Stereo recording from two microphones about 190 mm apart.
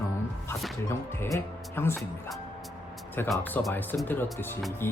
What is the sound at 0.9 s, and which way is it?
Speech, 15° left (ahead or behind).